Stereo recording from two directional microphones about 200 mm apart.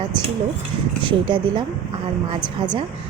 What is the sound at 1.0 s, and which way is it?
Speech, 25° right (ahead or behind).